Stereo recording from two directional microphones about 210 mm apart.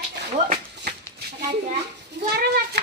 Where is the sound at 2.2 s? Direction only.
45° right (ahead or behind).